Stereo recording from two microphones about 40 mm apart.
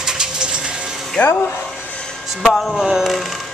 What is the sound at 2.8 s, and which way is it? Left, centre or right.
Speech, centre.